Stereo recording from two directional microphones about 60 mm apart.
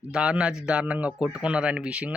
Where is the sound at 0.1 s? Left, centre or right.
Centre.